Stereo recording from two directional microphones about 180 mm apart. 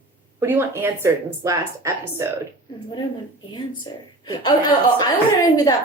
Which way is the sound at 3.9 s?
25° left (ahead or behind).